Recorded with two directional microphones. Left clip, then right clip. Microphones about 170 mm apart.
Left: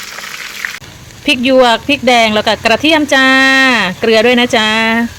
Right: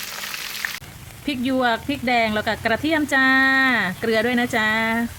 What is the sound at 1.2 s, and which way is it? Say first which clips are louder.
Speech: left 13 dB; 10° left (ahead or behind).